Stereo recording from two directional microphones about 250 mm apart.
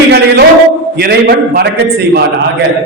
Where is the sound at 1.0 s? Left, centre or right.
Right.